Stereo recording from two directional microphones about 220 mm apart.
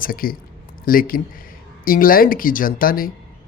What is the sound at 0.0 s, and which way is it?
Speech, 40° left (ahead or behind).